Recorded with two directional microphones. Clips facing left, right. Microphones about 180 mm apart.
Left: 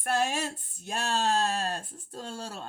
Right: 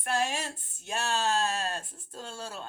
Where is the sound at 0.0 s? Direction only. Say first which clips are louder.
Left 2 dB; 45° left (ahead or behind).